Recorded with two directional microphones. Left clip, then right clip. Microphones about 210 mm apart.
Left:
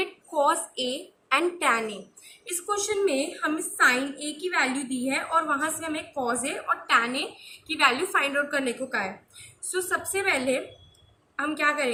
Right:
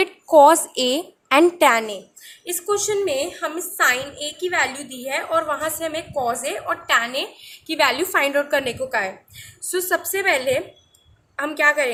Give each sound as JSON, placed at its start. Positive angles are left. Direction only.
{"t": 0.0, "sound": "a woman's voice", "side_deg": -55}